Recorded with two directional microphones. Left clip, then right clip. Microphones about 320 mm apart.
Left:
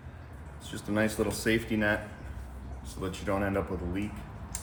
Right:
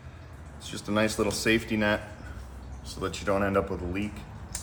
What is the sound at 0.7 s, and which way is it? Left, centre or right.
Speech, right.